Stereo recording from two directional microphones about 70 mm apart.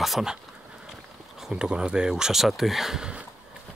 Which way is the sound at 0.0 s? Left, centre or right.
Centre.